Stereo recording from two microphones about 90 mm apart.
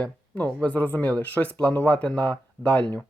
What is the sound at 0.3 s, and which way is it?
Speech, 15° left (ahead or behind).